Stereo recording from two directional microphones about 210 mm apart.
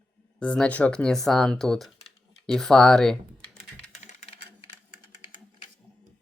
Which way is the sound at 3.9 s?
30° left (ahead or behind).